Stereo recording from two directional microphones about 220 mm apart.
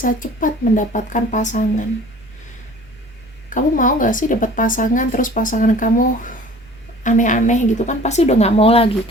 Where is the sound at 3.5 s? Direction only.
35° left (ahead or behind).